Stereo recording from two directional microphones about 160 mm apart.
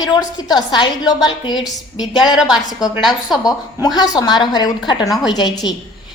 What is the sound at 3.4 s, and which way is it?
A woman's voice, 25° left (ahead or behind).